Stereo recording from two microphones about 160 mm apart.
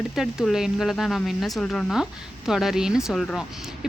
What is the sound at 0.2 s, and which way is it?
Speech, centre (ahead or behind).